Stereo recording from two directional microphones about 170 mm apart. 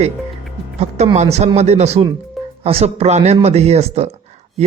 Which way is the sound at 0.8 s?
40° right (ahead or behind).